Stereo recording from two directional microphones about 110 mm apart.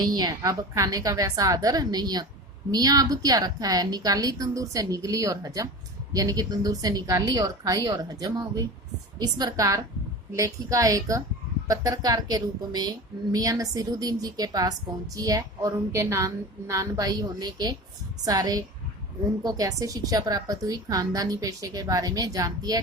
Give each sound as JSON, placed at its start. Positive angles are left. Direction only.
{"t": 0.0, "sound": "a woman's voice", "side_deg": -35}